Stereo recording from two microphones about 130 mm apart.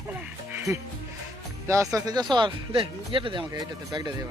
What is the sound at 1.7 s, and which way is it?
Speech, 25° right (ahead or behind).